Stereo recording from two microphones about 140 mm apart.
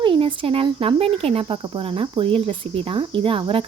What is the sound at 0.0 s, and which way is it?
Speech, 35° right (ahead or behind).